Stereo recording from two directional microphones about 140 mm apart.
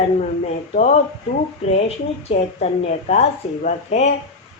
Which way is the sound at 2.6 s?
50° left (ahead or behind).